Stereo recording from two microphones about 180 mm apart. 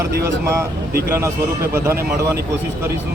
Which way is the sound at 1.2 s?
15° right (ahead or behind).